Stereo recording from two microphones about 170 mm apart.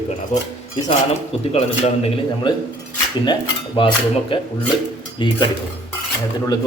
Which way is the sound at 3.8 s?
30° left (ahead or behind).